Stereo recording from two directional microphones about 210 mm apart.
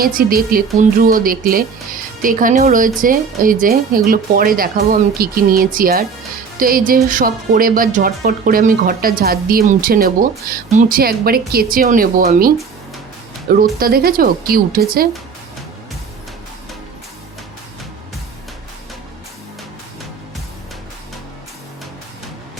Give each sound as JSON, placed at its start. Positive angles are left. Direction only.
{"t": 0.0, "sound": "speech", "side_deg": -45}
{"t": 13.6, "sound": "speech", "side_deg": -45}